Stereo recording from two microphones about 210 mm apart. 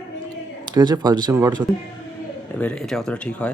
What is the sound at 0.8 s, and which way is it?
Speech, 20° right (ahead or behind).